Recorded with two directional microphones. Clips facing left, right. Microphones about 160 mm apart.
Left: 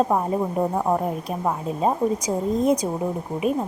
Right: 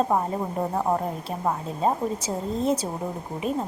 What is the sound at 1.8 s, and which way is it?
A woman's voice, 15° left (ahead or behind).